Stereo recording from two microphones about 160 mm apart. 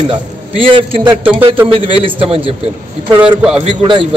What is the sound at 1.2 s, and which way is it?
Speech, 10° right (ahead or behind).